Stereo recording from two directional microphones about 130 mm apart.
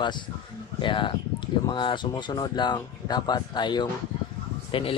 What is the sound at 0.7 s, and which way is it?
Speech, 40° left (ahead or behind).